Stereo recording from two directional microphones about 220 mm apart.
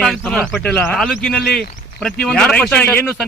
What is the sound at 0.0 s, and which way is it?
Speech, 5° left (ahead or behind).